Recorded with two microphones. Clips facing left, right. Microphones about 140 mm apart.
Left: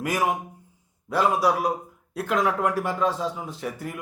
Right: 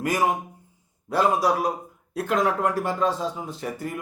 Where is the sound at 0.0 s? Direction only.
5° left (ahead or behind).